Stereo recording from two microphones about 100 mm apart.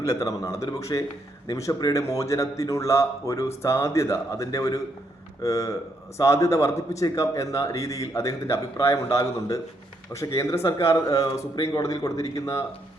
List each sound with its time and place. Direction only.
0.0 s a man's voice: 35° left (ahead or behind)